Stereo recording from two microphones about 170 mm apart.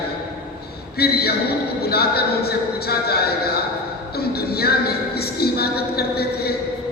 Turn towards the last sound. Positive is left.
turn(degrees=65)  # may be behind; listen again after turning